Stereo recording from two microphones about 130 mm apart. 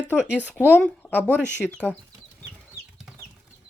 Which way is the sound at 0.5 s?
10° left (ahead or behind).